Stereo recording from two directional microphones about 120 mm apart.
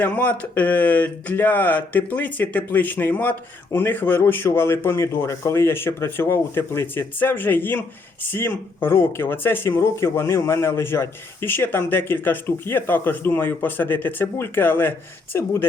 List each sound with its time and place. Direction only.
0.0 s speech: 15° left (ahead or behind)